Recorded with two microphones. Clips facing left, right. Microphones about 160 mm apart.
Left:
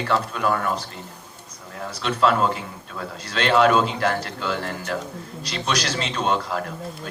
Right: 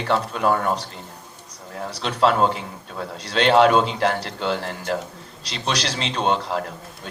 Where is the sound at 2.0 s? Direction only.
30° right (ahead or behind).